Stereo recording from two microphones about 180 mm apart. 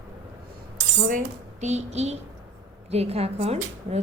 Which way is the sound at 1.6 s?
40° right (ahead or behind).